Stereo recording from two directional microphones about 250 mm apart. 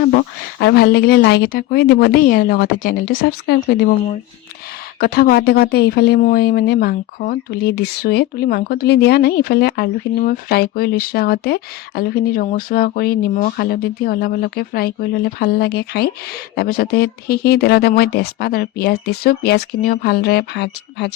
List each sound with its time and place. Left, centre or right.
0.0 s speech: left
4.9 s speech: left